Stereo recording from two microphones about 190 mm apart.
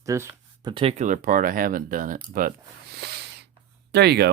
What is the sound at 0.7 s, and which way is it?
Speech, 30° right (ahead or behind).